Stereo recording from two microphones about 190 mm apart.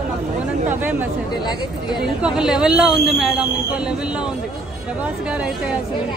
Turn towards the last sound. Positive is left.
turn(degrees=-5)  # may be behind; listen again after turning